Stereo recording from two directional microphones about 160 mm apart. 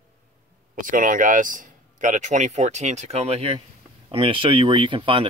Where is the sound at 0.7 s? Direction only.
55° right (ahead or behind).